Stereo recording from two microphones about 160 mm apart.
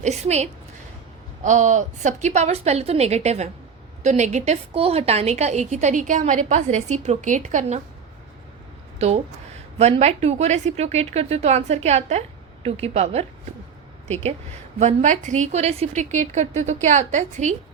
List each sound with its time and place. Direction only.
0.0 s a woman's voice: 45° right (ahead or behind)
1.5 s a woman's voice: 50° right (ahead or behind)
9.0 s a woman's voice: 40° right (ahead or behind)
14.8 s a woman's voice: 50° right (ahead or behind)